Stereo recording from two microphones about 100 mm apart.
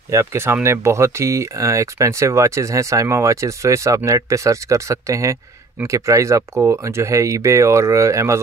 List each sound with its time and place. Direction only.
0.1 s speech: 25° right (ahead or behind)